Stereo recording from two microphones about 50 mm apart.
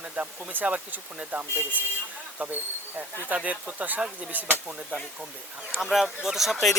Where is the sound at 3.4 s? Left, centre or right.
Right.